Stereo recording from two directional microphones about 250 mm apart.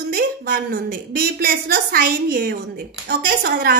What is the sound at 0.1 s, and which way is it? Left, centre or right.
A woman's voice, right.